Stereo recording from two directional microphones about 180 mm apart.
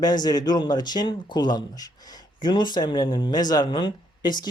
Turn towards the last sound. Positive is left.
turn(degrees=25)  # may be behind; listen again after turning